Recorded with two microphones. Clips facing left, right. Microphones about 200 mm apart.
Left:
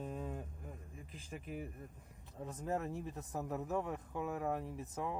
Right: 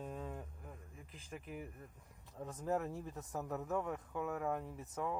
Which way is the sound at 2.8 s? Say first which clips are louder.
Left 1 dB; 20° left (ahead or behind).